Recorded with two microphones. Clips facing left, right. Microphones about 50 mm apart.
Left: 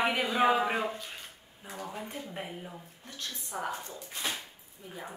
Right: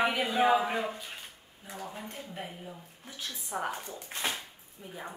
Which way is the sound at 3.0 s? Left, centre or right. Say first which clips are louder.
Right 2 dB; centre.